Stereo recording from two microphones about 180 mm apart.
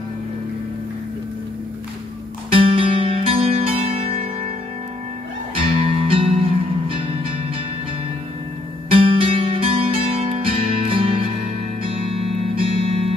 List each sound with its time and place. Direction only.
2.5 s music: 30° right (ahead or behind)
5.5 s music: 30° right (ahead or behind)
8.9 s music: 30° right (ahead or behind)